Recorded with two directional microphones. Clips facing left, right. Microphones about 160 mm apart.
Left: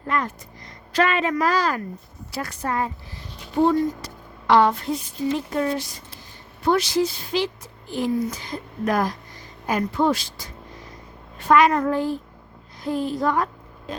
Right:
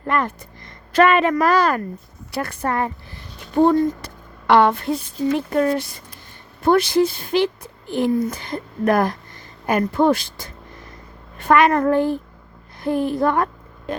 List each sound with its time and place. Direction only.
0.1 s a woman's voice: 60° right (ahead or behind)